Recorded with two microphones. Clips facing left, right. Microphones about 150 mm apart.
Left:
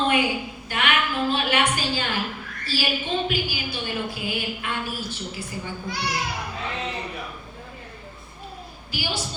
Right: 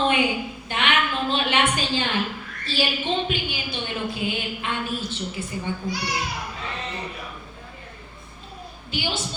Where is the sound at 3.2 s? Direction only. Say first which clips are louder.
Left 1 dB; 25° right (ahead or behind).